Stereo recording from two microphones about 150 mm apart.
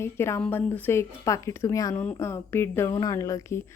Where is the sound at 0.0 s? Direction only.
15° left (ahead or behind).